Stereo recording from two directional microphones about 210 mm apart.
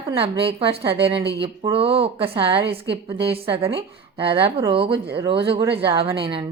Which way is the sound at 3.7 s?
25° right (ahead or behind).